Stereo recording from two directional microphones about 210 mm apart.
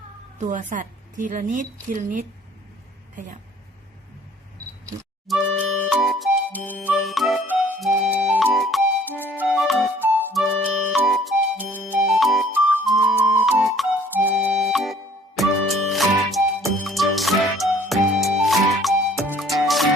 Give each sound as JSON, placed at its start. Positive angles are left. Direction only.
{"t": 0.3, "sound": "a woman's voice", "side_deg": -35}
{"t": 5.8, "sound": "music", "side_deg": 0}